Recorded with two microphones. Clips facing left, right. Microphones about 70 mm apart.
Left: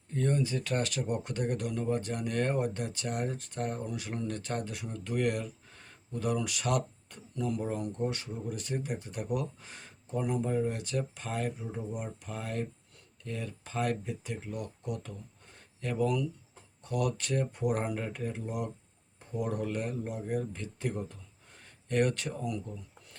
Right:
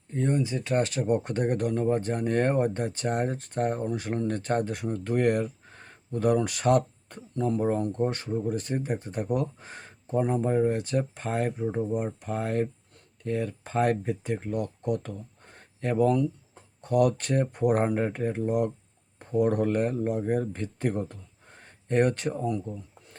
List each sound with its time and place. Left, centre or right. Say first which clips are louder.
0.1 s speech: right 3 dB; right